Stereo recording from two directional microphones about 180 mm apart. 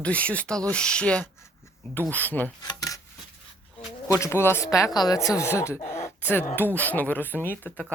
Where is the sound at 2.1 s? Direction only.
10° left (ahead or behind).